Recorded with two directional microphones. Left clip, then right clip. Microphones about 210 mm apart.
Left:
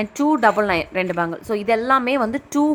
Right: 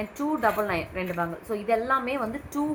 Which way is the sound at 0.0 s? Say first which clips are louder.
Left 9 dB; 55° left (ahead or behind).